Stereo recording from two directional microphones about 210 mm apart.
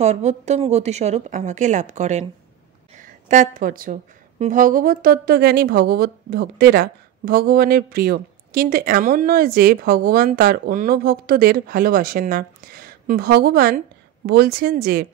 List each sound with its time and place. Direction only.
0.0 s a woman's voice: 35° right (ahead or behind)